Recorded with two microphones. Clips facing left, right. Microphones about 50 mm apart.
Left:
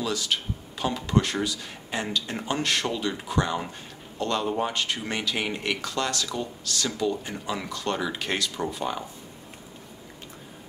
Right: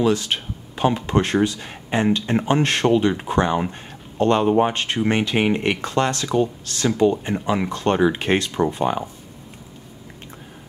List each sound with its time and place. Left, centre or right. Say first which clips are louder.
0.0 s speech: right 8 dB; right